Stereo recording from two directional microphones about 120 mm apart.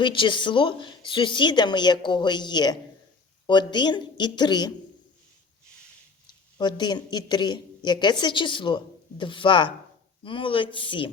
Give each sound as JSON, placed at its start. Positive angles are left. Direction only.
{"t": 0.0, "sound": "a woman's voice", "side_deg": 45}
{"t": 6.2, "sound": "a man's voice", "side_deg": 40}